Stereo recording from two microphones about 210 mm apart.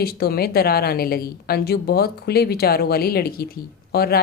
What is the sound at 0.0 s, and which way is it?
A woman's voice, 45° left (ahead or behind).